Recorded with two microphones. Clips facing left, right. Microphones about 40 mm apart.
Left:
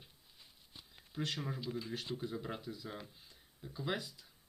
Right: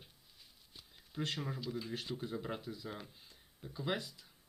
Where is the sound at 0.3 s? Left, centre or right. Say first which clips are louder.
Left 1 dB; centre.